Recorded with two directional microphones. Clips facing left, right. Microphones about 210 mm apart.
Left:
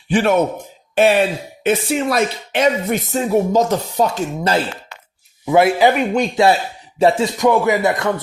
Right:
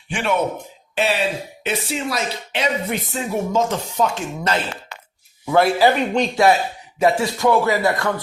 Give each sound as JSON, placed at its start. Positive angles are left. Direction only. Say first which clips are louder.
{"t": 0.1, "sound": "a man's voice", "louder": "left 7 dB", "side_deg": 40}
{"t": 0.9, "sound": "speech", "louder": "left 7 dB", "side_deg": 50}
{"t": 5.6, "sound": "speech", "louder": "left 2 dB", "side_deg": 15}